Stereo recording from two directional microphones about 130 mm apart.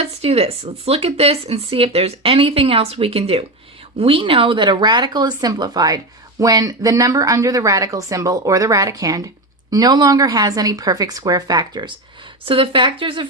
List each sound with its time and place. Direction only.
0.0 s speech: 50° right (ahead or behind)